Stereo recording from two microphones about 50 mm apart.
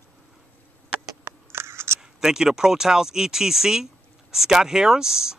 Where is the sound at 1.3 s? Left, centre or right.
Right.